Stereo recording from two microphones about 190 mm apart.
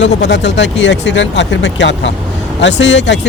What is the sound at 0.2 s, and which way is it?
Speech, 65° left (ahead or behind).